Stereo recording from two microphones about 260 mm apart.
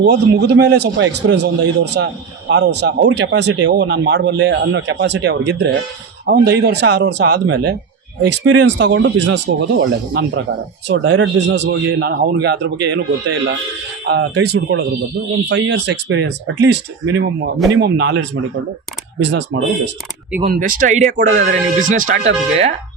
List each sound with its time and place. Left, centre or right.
0.0 s speech: right
20.4 s speech: right